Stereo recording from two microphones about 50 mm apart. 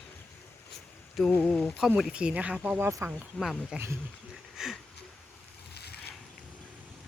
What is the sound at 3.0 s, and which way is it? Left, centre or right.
Speech, right.